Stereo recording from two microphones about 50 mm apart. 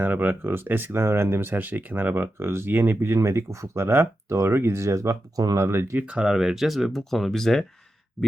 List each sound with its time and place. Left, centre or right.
0.0 s speech: right
0.9 s speech: right
5.5 s speech: right
6.2 s speech: centre